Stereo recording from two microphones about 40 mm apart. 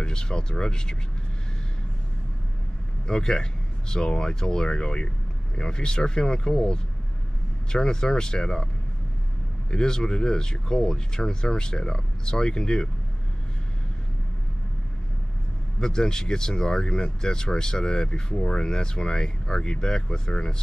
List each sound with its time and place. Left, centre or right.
0.0 s speech: centre
3.1 s speech: centre
9.7 s speech: centre
15.8 s speech: centre